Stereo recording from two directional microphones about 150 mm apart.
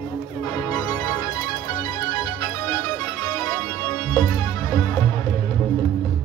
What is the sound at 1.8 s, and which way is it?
Music, 25° left (ahead or behind).